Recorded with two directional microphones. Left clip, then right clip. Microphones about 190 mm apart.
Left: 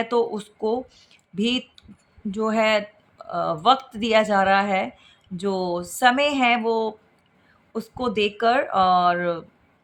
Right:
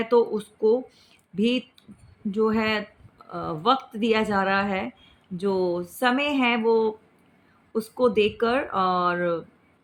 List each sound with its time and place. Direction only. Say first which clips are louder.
0.0 s speech: right 1 dB; 25° left (ahead or behind)